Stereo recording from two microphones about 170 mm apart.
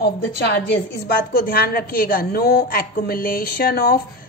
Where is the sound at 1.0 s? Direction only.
60° left (ahead or behind).